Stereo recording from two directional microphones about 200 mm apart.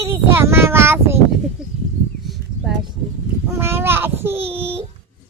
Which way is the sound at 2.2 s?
Centre (ahead or behind).